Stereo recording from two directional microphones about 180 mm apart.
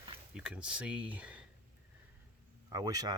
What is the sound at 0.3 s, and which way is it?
Speech, 5° right (ahead or behind).